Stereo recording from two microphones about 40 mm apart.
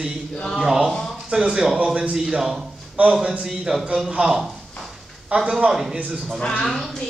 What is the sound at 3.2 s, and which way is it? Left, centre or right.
Speech, right.